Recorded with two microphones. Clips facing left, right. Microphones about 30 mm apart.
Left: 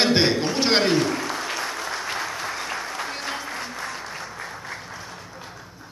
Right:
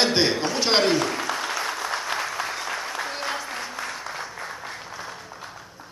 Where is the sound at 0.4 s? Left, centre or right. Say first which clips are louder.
Left 1 dB; centre.